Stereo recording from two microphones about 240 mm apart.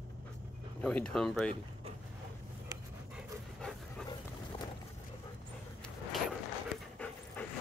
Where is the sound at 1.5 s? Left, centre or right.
Right.